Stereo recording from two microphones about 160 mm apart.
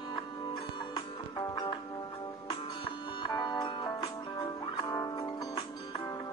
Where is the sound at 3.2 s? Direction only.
25° left (ahead or behind).